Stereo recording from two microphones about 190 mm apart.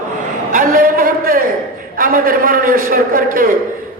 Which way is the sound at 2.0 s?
50° right (ahead or behind).